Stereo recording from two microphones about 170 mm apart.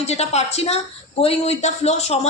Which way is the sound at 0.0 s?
40° left (ahead or behind).